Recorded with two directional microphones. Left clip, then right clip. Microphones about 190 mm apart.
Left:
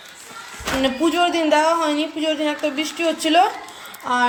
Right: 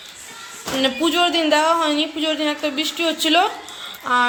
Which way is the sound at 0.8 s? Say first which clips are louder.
Right 1 dB; 5° left (ahead or behind).